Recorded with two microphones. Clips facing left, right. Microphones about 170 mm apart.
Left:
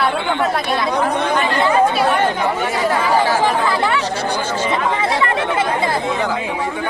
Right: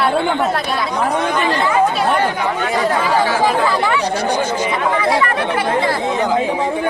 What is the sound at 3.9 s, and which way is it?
Speech, 15° right (ahead or behind).